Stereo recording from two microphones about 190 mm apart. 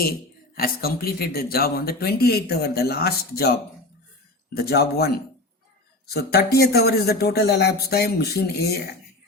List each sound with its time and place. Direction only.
0.5 s speech: 55° left (ahead or behind)
4.5 s speech: 55° left (ahead or behind)
6.1 s speech: 55° left (ahead or behind)